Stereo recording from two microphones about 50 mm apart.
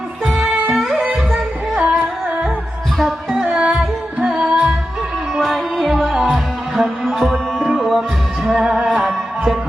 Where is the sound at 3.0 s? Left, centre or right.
Centre.